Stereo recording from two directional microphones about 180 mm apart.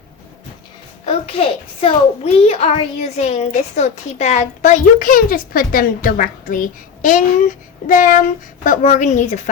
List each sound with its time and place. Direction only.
1.0 s a child's voice: 30° left (ahead or behind)